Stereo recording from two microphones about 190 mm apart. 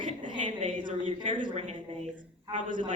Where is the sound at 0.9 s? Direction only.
40° right (ahead or behind).